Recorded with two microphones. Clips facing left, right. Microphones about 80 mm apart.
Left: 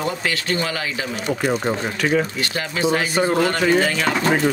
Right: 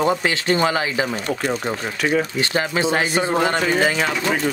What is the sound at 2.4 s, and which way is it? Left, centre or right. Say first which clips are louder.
Speech: right 2 dB; right.